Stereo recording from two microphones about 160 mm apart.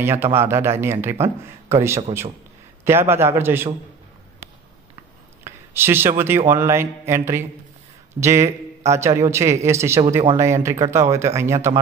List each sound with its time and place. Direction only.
0.0 s a man's voice: 15° right (ahead or behind)
5.4 s a man's voice: 15° right (ahead or behind)